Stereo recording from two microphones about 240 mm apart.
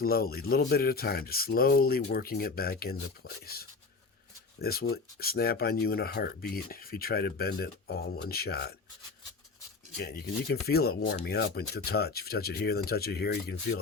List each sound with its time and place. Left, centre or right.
0.0 s speech: left
10.0 s speech: left